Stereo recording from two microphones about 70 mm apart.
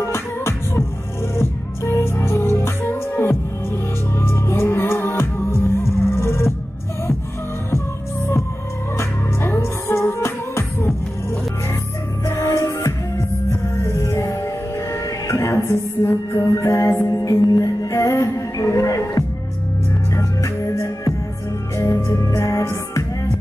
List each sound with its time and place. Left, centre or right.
0.0 s beatboxing: left
1.3 s music: left
8.9 s music: left
12.3 s music: left